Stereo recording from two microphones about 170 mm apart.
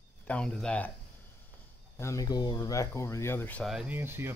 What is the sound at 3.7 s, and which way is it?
Speech, 5° right (ahead or behind).